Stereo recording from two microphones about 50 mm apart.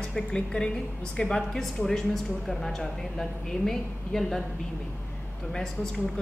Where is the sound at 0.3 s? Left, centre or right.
Centre.